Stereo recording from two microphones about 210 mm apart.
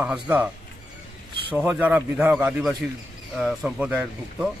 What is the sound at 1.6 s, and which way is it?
A man's voice, 5° right (ahead or behind).